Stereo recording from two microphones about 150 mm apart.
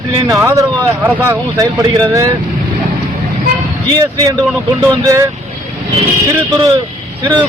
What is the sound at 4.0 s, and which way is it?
Speech, 25° right (ahead or behind).